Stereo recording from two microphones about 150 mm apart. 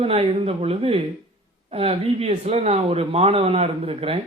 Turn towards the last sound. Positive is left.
turn(degrees=-40)  # may be behind; listen again after turning